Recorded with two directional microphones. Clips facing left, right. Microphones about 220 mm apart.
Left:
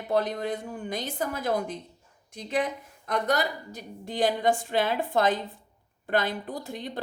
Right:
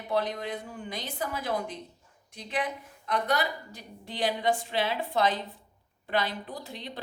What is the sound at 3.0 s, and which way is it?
A woman's voice, 45° left (ahead or behind).